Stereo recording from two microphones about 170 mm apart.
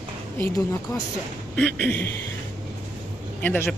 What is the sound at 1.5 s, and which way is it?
Speech, 10° left (ahead or behind).